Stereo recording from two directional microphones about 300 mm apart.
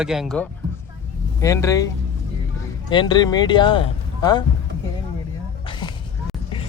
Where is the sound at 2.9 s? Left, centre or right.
Centre.